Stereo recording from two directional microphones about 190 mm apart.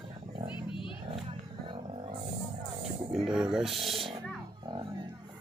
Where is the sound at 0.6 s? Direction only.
25° left (ahead or behind).